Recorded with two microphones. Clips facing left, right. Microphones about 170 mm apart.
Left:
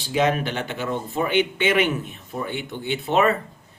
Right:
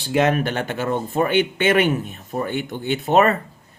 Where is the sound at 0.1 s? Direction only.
55° right (ahead or behind).